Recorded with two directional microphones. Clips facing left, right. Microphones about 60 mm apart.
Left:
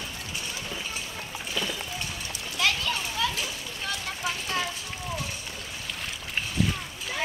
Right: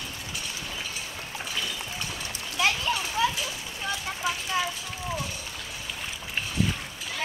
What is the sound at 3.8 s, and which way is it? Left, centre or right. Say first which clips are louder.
Vehicle: right 2 dB; centre.